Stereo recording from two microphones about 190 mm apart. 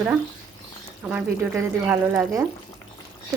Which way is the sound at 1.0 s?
5° right (ahead or behind).